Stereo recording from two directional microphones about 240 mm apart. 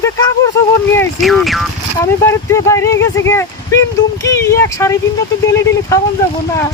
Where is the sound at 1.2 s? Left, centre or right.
Centre.